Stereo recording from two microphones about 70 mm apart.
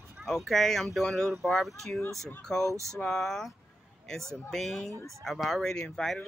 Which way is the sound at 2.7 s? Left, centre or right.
Right.